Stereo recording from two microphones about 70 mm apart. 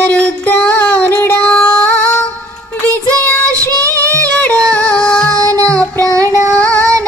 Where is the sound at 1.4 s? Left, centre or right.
Left.